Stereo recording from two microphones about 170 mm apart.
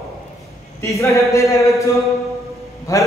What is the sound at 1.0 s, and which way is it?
Speech, 15° left (ahead or behind).